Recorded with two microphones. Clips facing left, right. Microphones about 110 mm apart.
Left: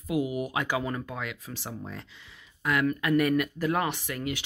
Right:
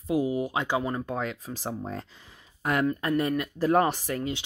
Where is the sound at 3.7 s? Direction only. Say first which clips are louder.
Right 5 dB; 40° right (ahead or behind).